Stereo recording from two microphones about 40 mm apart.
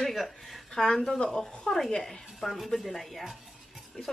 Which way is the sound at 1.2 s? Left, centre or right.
Centre.